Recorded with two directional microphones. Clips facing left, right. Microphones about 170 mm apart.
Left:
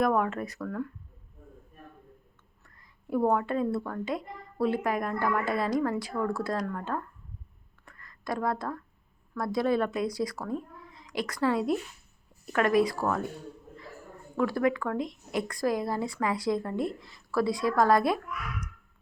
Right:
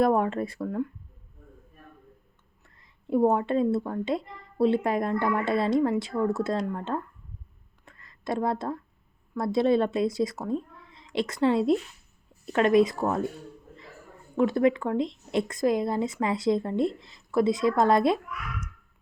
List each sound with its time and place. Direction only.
0.0 s speech: 30° right (ahead or behind)
2.6 s speech: 25° right (ahead or behind)
7.9 s a sound: 25° right (ahead or behind)
9.3 s a woman's voice: 25° right (ahead or behind)
14.3 s speech: 20° right (ahead or behind)